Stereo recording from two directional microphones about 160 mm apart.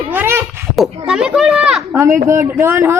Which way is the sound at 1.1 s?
5° right (ahead or behind).